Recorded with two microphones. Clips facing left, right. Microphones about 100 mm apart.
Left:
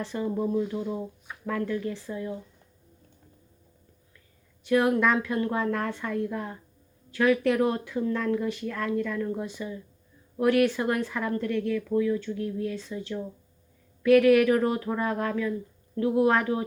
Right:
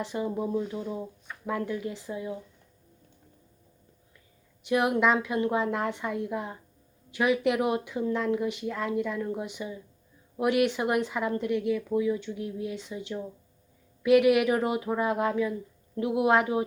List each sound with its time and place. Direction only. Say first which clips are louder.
0.0 s speech: left 1 dB; 15° right (ahead or behind)
4.6 s speech: left 1 dB; 20° right (ahead or behind)